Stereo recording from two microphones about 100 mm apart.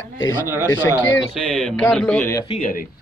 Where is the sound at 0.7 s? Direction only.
25° left (ahead or behind).